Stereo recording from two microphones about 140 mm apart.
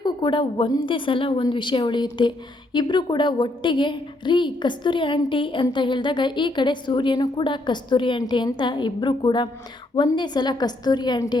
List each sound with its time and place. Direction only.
0.0 s a woman's voice: 35° left (ahead or behind)